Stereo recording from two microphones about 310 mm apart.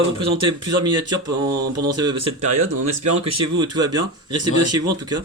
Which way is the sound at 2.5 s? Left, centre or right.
Right.